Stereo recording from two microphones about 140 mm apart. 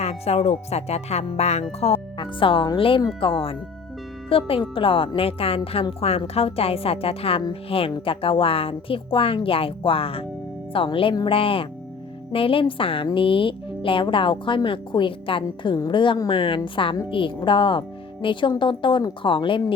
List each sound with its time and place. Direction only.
0.0 s speech: 45° left (ahead or behind)
1.8 s music: 45° left (ahead or behind)
2.2 s speech: 40° left (ahead or behind)